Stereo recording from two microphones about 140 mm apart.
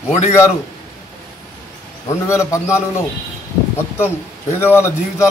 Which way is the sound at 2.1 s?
20° left (ahead or behind).